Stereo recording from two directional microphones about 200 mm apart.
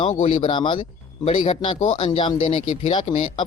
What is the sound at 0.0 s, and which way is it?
Speech, 35° left (ahead or behind).